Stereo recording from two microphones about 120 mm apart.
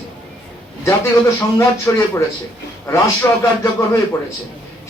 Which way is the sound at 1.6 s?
25° left (ahead or behind).